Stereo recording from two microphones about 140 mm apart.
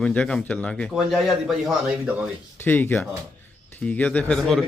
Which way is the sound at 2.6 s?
15° left (ahead or behind).